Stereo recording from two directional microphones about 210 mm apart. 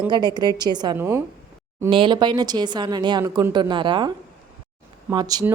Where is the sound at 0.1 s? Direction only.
20° right (ahead or behind).